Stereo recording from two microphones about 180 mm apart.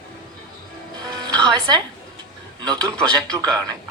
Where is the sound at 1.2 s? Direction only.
25° right (ahead or behind).